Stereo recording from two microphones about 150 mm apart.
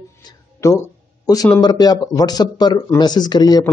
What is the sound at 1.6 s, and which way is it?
A man's voice, 25° left (ahead or behind).